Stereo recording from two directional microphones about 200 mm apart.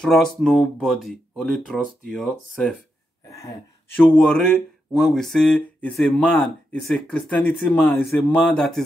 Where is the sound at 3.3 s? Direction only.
15° left (ahead or behind).